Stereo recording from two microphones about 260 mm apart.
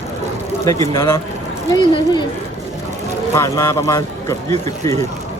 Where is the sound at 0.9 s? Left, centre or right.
Centre.